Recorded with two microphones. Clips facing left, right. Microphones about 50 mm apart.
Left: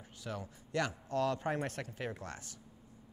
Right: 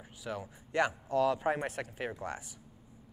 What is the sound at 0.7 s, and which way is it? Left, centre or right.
Speech, right.